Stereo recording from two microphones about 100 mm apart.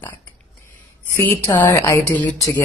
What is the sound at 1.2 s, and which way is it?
Speech, 25° left (ahead or behind).